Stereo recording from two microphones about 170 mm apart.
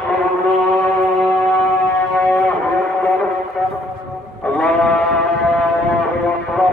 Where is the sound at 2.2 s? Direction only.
10° left (ahead or behind).